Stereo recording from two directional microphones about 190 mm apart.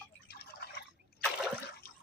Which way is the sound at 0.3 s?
55° left (ahead or behind).